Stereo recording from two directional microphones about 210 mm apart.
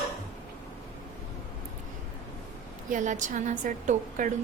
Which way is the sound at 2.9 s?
35° right (ahead or behind).